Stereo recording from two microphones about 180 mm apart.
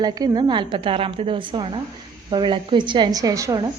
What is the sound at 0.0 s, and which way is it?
Speech, 20° right (ahead or behind).